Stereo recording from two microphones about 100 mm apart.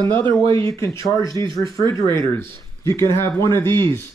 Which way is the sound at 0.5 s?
25° left (ahead or behind).